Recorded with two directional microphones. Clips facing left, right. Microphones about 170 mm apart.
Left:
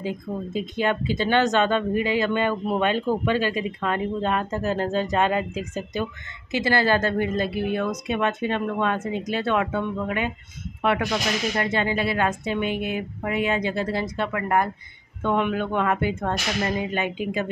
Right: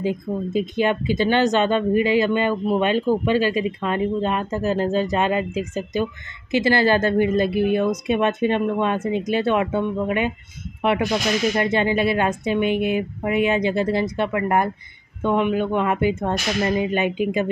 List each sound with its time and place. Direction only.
0.0 s speech: 10° right (ahead or behind)
15.2 s speech: 10° right (ahead or behind)